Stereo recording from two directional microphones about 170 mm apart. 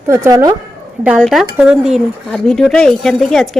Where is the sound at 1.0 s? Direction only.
5° right (ahead or behind).